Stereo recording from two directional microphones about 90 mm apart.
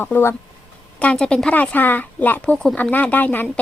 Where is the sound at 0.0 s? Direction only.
25° left (ahead or behind).